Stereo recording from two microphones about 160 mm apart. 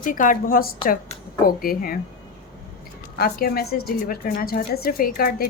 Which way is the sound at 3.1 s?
70° left (ahead or behind).